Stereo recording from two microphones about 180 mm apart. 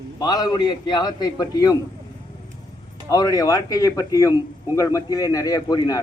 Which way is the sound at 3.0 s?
20° left (ahead or behind).